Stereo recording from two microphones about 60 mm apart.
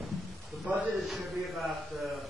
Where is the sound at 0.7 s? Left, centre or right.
Right.